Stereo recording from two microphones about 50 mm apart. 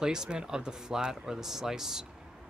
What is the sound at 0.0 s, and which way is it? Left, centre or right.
Speech, centre.